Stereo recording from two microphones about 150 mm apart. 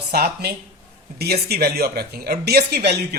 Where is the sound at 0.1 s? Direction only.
90° right.